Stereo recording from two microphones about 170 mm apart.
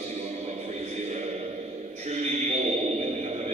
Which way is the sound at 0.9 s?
45° right (ahead or behind).